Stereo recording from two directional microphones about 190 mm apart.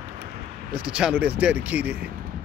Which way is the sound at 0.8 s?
5° right (ahead or behind).